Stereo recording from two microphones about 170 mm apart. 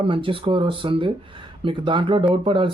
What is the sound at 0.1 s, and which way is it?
Speech, 30° right (ahead or behind).